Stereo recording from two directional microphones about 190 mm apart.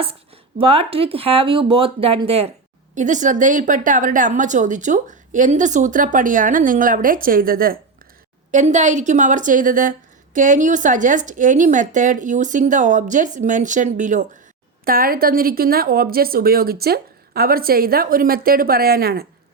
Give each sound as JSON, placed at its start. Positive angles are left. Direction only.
{"t": 0.6, "sound": "speech", "side_deg": -30}
{"t": 2.9, "sound": "a woman's voice", "side_deg": -40}